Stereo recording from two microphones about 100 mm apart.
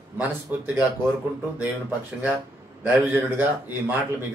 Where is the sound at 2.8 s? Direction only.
15° right (ahead or behind).